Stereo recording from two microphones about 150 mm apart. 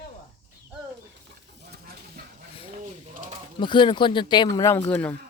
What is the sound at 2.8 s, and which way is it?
Bird, 60° right (ahead or behind).